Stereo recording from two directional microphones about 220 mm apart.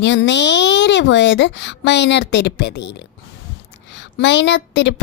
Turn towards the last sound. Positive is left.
turn(degrees=55)  # may be behind; listen again after turning